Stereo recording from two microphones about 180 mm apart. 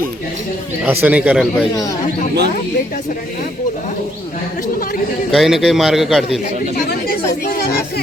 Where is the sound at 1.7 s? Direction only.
20° left (ahead or behind).